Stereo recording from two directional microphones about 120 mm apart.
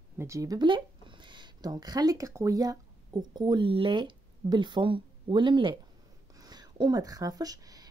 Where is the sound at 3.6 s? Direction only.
45° right (ahead or behind).